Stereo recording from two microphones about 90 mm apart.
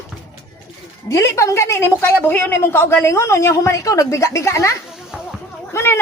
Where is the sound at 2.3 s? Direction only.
20° left (ahead or behind).